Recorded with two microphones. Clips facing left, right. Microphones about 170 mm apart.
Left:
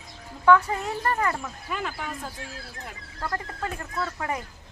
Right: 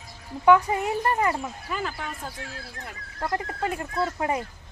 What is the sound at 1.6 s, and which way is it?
Speech, centre (ahead or behind).